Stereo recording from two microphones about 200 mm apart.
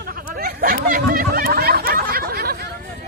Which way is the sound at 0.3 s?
50° right (ahead or behind).